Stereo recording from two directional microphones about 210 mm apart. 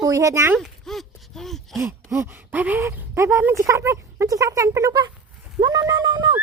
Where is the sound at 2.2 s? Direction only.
10° right (ahead or behind).